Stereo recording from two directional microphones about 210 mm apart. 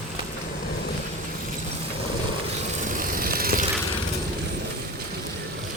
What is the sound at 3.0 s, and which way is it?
Vehicle, 45° right (ahead or behind).